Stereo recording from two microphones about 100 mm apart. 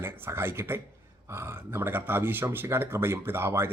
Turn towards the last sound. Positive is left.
turn(degrees=-25)  # may be behind; listen again after turning